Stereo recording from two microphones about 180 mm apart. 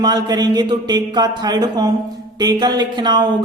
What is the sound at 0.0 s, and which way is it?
Speech, 25° right (ahead or behind).